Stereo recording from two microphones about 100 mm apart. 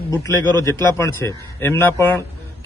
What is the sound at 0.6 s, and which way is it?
A man's voice, 30° left (ahead or behind).